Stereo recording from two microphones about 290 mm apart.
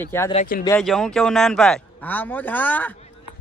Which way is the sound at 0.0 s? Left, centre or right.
Centre.